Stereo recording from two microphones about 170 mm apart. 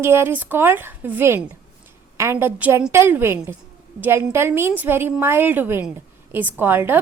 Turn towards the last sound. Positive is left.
turn(degrees=-10)  # may be behind; listen again after turning